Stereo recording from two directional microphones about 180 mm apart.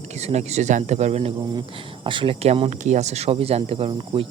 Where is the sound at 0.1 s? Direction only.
40° right (ahead or behind).